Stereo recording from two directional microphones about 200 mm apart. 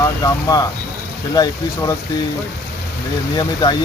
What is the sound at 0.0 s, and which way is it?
Speech, 15° left (ahead or behind).